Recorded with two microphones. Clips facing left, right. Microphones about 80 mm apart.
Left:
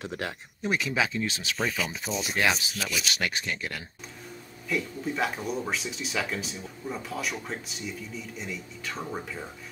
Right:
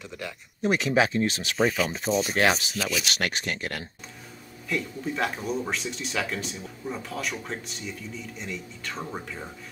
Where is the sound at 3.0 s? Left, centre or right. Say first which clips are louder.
Right 2 dB; right.